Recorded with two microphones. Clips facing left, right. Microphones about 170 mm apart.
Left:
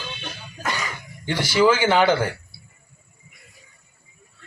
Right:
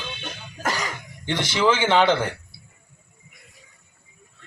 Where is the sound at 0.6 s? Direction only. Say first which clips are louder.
Right 1 dB; 40° right (ahead or behind).